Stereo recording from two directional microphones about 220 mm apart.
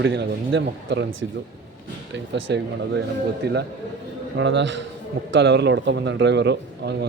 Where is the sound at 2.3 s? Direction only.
55° right (ahead or behind).